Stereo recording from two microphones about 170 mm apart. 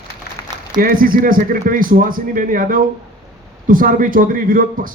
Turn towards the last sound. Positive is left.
turn(degrees=-55)  # may be behind; listen again after turning